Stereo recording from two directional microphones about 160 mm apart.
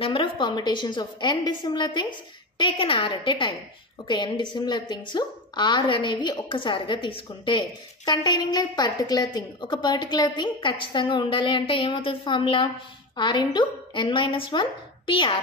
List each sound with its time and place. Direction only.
0.0 s a woman's voice: 35° left (ahead or behind)